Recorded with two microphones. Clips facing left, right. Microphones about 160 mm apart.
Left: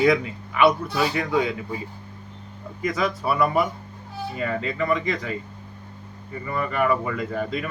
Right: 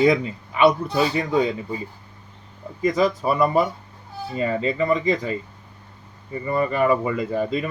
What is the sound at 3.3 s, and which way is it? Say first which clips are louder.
Speech: even; 30° right (ahead or behind).